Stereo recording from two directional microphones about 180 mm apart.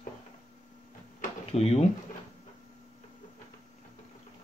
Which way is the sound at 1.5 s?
35° left (ahead or behind).